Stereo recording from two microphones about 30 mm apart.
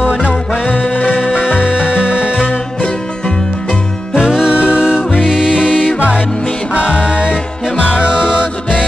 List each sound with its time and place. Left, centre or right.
0.7 s music: left
1.1 s music: right
4.5 s music: right
5.2 s music: right
6.7 s music: right
7.7 s music: right